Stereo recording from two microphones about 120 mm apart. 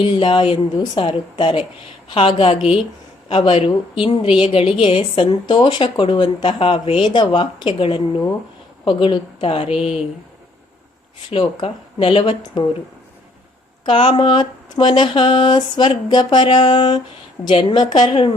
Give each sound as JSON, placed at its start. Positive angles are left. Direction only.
{"t": 0.0, "sound": "a woman's voice", "side_deg": 45}
{"t": 11.3, "sound": "a woman's voice", "side_deg": 50}
{"t": 13.8, "sound": "a woman's voice", "side_deg": 40}